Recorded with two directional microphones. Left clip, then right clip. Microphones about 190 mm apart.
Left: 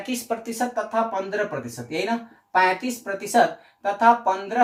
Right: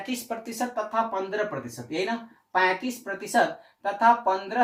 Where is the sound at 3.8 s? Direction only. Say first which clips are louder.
Left 3 dB; 20° left (ahead or behind).